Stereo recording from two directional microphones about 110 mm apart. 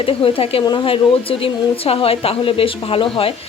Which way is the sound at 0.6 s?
40° left (ahead or behind).